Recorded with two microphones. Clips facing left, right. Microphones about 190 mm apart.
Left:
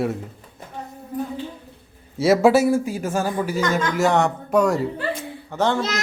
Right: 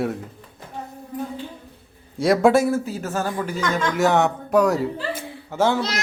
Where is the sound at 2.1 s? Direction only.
5° left (ahead or behind).